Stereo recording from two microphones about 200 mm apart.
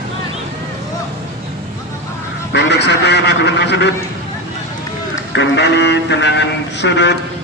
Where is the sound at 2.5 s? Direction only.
60° left (ahead or behind).